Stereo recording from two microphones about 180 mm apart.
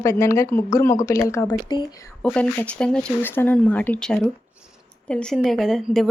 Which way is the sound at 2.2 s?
5° left (ahead or behind).